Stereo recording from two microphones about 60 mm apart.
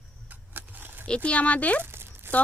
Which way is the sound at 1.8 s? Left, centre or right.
Right.